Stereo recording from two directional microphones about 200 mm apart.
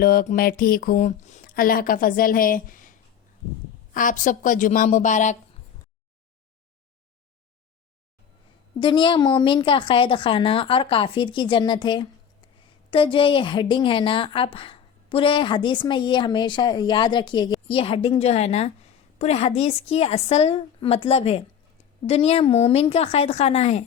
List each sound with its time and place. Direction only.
0.0 s a sound: 45° left (ahead or behind)
3.9 s speech: 40° left (ahead or behind)
8.8 s a woman's voice: 25° left (ahead or behind)